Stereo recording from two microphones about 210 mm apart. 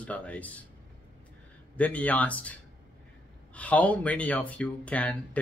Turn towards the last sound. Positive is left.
turn(degrees=5)  # may be behind; listen again after turning